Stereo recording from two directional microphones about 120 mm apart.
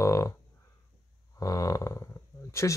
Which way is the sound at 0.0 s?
25° left (ahead or behind).